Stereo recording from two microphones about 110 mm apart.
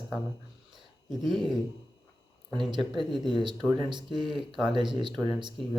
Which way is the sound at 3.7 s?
45° right (ahead or behind).